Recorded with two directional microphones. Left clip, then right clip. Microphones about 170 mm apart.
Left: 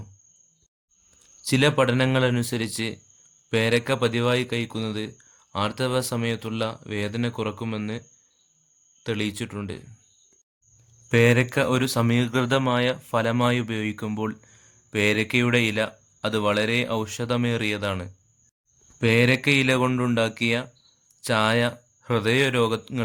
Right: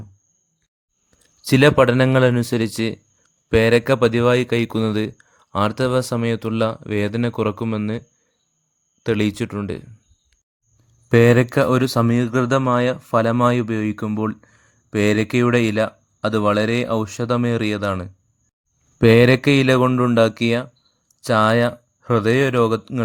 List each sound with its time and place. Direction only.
1.5 s speech: 40° right (ahead or behind)
9.0 s speech: 40° right (ahead or behind)
11.1 s speech: 35° right (ahead or behind)
18.9 s speech: 40° right (ahead or behind)